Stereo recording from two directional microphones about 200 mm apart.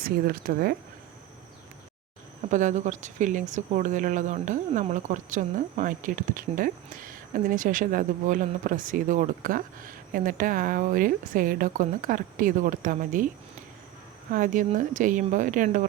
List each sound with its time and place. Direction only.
0.0 s speech: 50° right (ahead or behind)
2.5 s speech: 40° right (ahead or behind)
14.3 s speech: 40° right (ahead or behind)